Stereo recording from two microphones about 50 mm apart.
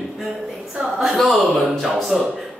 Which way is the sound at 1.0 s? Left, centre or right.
Centre.